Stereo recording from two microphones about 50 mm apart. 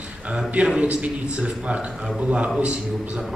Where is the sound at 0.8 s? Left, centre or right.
Right.